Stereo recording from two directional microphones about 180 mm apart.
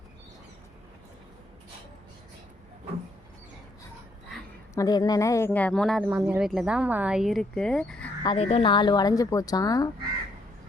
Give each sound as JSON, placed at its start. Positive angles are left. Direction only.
{"t": 4.7, "sound": "a woman's voice", "side_deg": 20}
{"t": 5.5, "sound": "speech", "side_deg": 5}
{"t": 8.2, "sound": "speech", "side_deg": 30}